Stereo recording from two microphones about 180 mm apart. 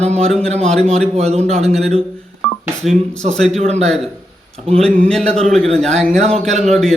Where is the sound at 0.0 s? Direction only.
35° right (ahead or behind).